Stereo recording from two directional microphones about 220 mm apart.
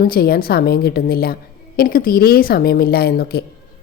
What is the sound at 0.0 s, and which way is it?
A woman's voice, 45° left (ahead or behind).